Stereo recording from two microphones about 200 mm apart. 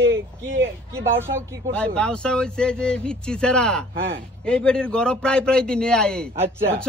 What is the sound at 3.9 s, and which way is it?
Speech, 55° right (ahead or behind).